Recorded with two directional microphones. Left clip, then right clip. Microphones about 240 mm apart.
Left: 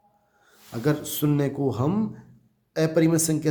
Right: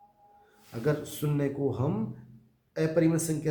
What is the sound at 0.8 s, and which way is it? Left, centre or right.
Speech, left.